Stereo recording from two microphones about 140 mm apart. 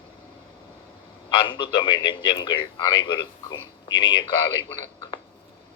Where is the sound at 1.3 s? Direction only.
35° left (ahead or behind).